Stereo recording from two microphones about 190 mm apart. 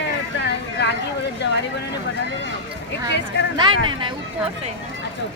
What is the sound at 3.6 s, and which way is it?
Speech, 25° right (ahead or behind).